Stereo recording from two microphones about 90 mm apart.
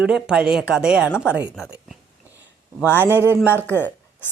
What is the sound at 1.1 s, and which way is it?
Speech, 25° left (ahead or behind).